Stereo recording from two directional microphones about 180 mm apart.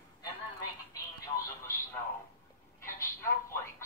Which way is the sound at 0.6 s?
20° left (ahead or behind).